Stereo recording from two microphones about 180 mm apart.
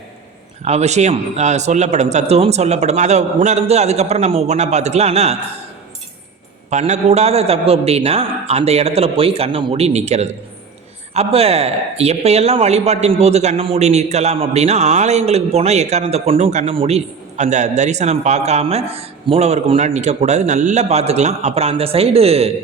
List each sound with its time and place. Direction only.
0.6 s speech: 40° right (ahead or behind)
6.7 s speech: 40° right (ahead or behind)